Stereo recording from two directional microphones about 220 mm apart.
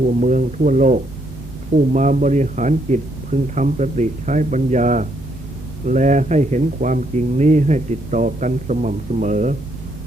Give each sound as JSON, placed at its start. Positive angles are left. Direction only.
{"t": 0.1, "sound": "speech", "side_deg": -35}